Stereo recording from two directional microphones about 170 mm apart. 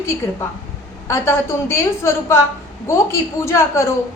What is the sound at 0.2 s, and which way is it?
A woman's voice, 20° left (ahead or behind).